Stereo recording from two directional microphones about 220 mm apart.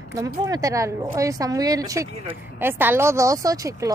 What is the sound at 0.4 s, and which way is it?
A woman's voice, 15° right (ahead or behind).